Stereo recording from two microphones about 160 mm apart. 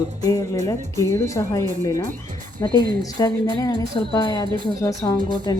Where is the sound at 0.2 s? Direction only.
20° left (ahead or behind).